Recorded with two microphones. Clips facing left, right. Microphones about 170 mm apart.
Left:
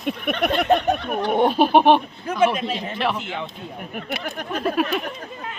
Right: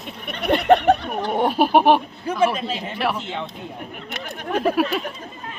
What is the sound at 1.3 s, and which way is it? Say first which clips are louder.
Speech: left 1 dB; 5° right (ahead or behind).